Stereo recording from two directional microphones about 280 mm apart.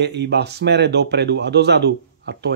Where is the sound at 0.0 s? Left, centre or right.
Right.